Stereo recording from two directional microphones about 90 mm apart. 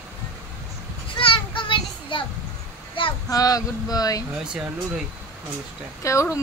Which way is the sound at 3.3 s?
40° left (ahead or behind).